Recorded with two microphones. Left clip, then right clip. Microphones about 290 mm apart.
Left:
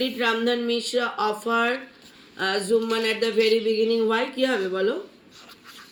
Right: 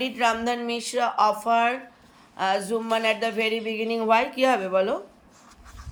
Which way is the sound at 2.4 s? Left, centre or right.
Centre.